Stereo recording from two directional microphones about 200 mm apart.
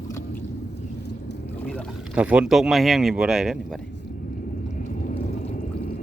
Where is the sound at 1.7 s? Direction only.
5° right (ahead or behind).